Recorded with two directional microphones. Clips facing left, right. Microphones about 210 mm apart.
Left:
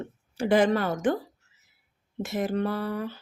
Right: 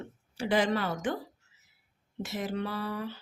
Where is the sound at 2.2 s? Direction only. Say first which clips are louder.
Left 6 dB; 50° left (ahead or behind).